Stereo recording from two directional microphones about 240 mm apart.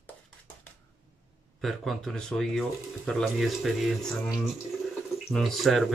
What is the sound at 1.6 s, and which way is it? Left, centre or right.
Speech, centre.